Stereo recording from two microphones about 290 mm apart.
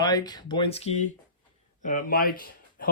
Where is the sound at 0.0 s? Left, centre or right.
Centre.